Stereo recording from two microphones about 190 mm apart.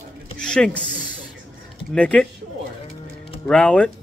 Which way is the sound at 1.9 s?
5° left (ahead or behind).